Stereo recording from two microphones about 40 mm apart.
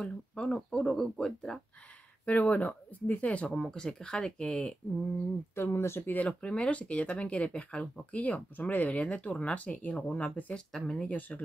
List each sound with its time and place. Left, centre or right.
0.0 s speech: left
0.7 s speech: centre
2.5 s speech: left
3.4 s speech: centre
5.5 s speech: left
6.2 s speech: left
8.1 s speech: left
10.5 s speech: centre
11.1 s speech: left